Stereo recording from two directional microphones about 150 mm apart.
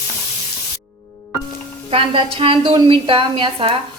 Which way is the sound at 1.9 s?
35° right (ahead or behind).